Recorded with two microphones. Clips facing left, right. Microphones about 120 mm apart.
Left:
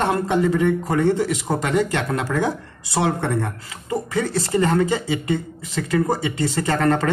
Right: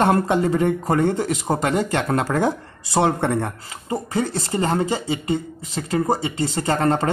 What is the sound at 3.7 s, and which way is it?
Speech, 30° right (ahead or behind).